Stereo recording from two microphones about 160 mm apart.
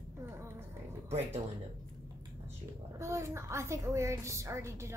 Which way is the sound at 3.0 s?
20° right (ahead or behind).